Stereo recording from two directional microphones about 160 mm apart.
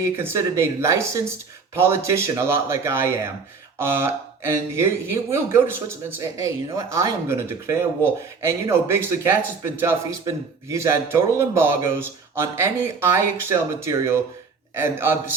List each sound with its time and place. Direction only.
0.0 s speech: 15° right (ahead or behind)